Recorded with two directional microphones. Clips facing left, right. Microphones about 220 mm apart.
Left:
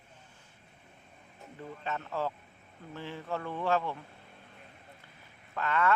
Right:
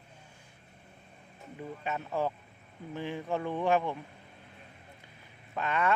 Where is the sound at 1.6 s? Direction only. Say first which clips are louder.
Right 2 dB; 15° right (ahead or behind).